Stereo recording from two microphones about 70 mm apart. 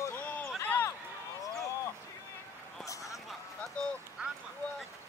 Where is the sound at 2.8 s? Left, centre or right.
Left.